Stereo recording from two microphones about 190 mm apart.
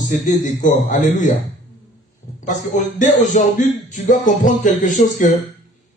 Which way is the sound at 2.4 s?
40° left (ahead or behind).